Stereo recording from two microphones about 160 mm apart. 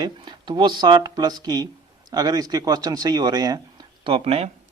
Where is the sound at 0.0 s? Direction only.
25° right (ahead or behind).